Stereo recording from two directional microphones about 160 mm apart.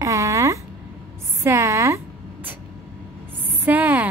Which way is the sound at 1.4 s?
20° right (ahead or behind).